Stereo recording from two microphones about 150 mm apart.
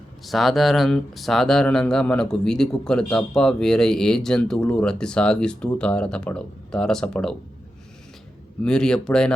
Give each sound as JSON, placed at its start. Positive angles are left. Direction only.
{"t": 0.3, "sound": "speech", "side_deg": 0}
{"t": 8.6, "sound": "speech", "side_deg": 5}